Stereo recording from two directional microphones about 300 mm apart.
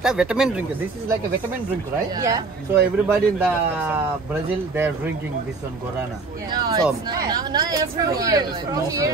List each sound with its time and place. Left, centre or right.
0.0 s speech: centre
2.1 s speech: centre
6.5 s speech: centre